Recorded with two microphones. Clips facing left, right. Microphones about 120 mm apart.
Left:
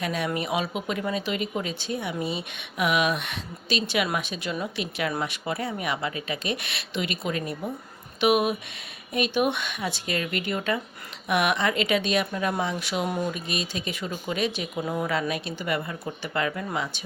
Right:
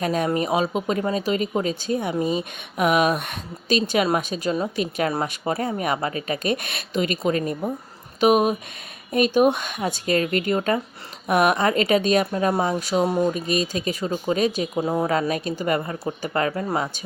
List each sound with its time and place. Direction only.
0.0 s speech: 40° right (ahead or behind)